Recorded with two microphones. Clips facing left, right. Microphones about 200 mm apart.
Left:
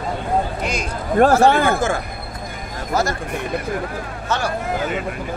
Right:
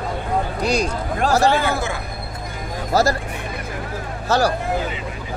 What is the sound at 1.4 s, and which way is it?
Speech, 55° left (ahead or behind).